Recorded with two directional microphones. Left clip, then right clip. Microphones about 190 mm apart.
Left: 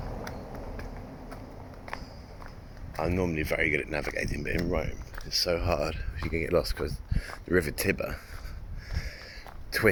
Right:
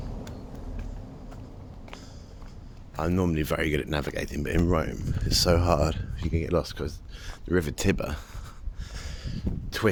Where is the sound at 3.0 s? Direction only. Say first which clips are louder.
Right 1 dB; 30° right (ahead or behind).